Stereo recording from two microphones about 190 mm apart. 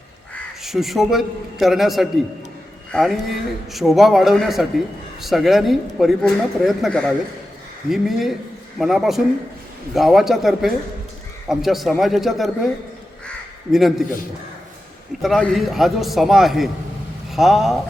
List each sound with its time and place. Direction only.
0.6 s a man's voice: centre (ahead or behind)
13.7 s a man's voice: centre (ahead or behind)
15.2 s a man's voice: centre (ahead or behind)